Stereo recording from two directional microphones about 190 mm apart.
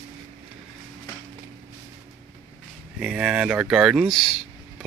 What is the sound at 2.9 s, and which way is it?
Speech, 5° right (ahead or behind).